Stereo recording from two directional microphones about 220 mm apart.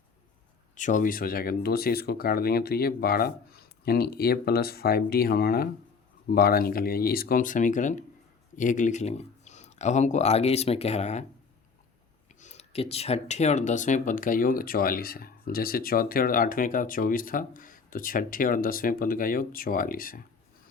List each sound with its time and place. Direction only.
0.8 s speech: 35° left (ahead or behind)
12.4 s speech: 30° left (ahead or behind)